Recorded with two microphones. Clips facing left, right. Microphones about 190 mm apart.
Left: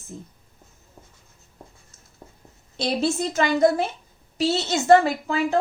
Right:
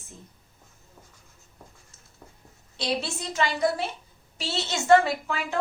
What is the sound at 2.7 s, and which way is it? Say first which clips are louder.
A woman's voice: left 6 dB; 45° left (ahead or behind).